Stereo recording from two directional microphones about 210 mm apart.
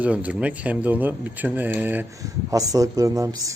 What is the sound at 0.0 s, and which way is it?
Speech, 5° right (ahead or behind).